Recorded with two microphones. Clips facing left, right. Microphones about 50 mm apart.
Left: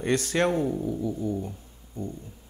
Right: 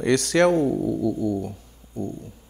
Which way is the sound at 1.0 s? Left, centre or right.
Right.